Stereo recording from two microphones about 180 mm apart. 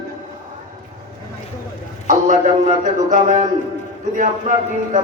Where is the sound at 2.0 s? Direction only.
45° right (ahead or behind).